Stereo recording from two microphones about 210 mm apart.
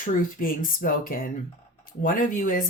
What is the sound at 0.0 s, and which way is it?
Speech, 40° left (ahead or behind).